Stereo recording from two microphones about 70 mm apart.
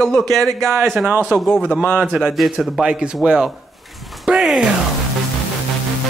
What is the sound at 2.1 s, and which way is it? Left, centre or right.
A man's voice, centre.